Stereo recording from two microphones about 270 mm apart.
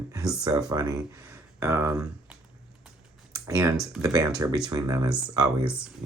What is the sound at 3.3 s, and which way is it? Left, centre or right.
Computer keyboard, centre.